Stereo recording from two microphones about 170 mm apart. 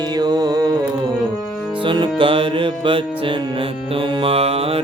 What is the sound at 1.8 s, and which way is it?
Music, 30° right (ahead or behind).